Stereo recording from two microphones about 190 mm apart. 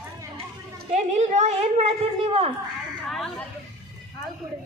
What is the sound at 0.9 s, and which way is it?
A woman's voice, 35° right (ahead or behind).